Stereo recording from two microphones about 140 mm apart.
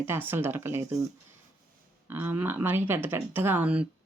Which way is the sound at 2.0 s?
15° right (ahead or behind).